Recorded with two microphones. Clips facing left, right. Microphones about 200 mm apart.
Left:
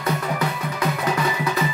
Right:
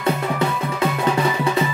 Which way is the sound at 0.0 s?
25° right (ahead or behind).